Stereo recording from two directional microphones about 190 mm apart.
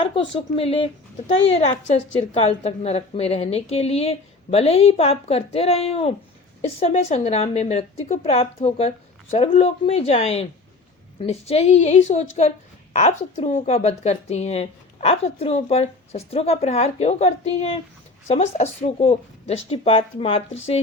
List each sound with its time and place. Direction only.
0.0 s speech: 25° left (ahead or behind)
2.4 s a woman's voice: 35° left (ahead or behind)